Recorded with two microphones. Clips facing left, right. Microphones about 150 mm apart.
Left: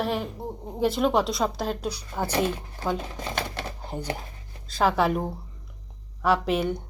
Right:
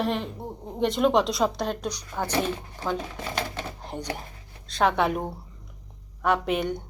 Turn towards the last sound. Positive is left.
turn(degrees=0)  # may be behind; listen again after turning